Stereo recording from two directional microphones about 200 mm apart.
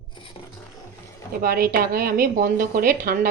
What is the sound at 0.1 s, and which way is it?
Filing, 25° left (ahead or behind).